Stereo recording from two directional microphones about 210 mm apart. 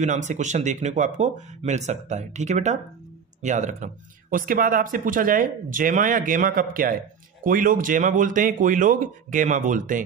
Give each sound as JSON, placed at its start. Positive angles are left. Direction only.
{"t": 0.0, "sound": "speech", "side_deg": -35}